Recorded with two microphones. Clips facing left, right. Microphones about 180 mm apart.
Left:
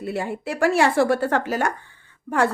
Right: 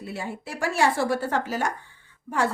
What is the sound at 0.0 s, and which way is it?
A woman's voice, 60° left (ahead or behind).